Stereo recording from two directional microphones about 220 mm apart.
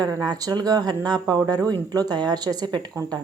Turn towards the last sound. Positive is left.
turn(degrees=-20)  # may be behind; listen again after turning